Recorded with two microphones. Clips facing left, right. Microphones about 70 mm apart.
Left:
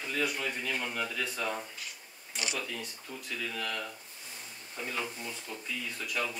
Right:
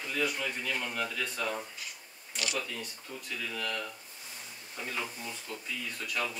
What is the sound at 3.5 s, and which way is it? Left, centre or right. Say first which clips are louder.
Speech: right 3 dB; centre.